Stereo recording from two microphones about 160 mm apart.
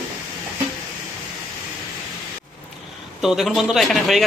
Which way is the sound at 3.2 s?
Centre (ahead or behind).